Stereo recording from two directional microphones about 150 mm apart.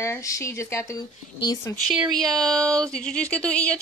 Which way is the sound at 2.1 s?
5° left (ahead or behind).